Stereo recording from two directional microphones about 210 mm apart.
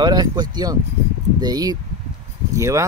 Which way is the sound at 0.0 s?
20° right (ahead or behind).